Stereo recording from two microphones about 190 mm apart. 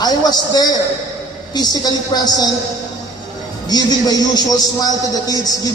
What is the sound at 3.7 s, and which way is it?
A man's voice, 20° left (ahead or behind).